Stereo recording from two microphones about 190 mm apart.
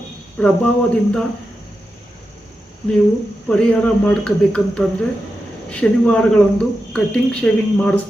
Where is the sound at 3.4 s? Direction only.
5° left (ahead or behind).